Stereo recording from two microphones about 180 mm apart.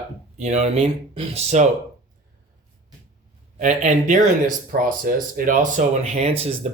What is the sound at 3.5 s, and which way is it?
Speech, 40° right (ahead or behind).